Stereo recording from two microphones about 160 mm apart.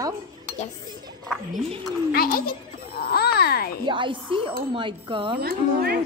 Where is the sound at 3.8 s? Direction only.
30° right (ahead or behind).